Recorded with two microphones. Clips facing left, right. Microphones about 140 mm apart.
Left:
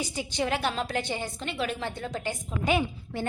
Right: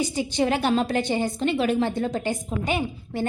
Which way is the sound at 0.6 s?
45° right (ahead or behind).